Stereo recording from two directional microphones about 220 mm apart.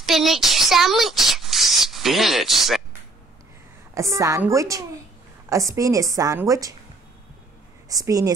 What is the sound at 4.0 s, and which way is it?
A woman's voice, 15° right (ahead or behind).